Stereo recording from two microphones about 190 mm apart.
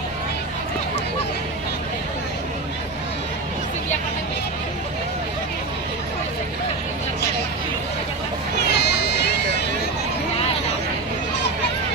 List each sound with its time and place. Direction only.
8.5 s run: 60° left (ahead or behind)